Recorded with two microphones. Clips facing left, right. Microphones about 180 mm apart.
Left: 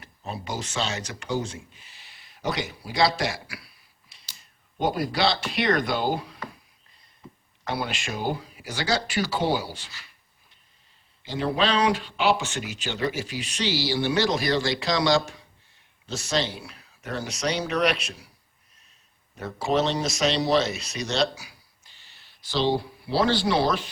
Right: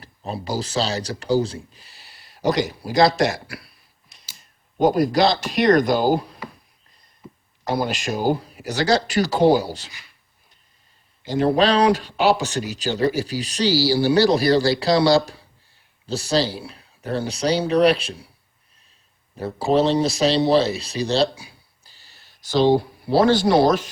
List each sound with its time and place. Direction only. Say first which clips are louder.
0.0 s speech: right 5 dB; 35° right (ahead or behind)
4.8 s speech: right 8 dB; 45° right (ahead or behind)
7.2 s a sound: right 4 dB; 10° right (ahead or behind)
7.6 s speech: right 7 dB; 40° right (ahead or behind)
11.2 s speech: right 7 dB; 45° right (ahead or behind)
19.4 s speech: right 6 dB; 30° right (ahead or behind)